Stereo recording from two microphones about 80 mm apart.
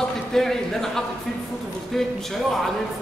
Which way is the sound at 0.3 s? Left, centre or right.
Centre.